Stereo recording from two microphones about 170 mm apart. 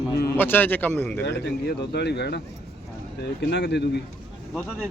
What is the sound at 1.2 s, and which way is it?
A man's voice, 90° left.